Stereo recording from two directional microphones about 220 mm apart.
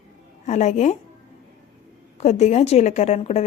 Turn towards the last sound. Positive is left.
turn(degrees=30)  # may be behind; listen again after turning